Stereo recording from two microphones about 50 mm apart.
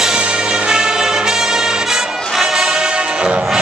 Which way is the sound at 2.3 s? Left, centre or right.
Centre.